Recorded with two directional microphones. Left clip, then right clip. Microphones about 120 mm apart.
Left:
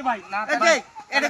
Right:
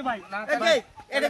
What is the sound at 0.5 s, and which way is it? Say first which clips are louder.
Speech: left 3 dB; 40° right (ahead or behind).